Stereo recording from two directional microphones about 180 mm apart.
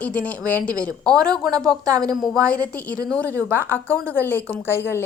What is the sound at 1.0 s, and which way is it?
Speech, 20° right (ahead or behind).